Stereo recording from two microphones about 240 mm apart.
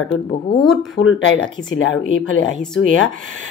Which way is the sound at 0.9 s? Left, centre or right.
Left.